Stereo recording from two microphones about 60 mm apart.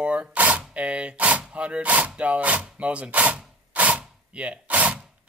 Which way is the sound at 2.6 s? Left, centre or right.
Right.